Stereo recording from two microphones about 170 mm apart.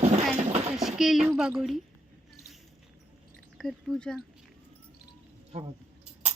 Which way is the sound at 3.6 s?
Centre (ahead or behind).